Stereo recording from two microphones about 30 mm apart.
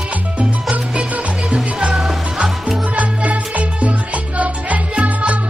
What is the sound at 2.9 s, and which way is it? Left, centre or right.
Music, right.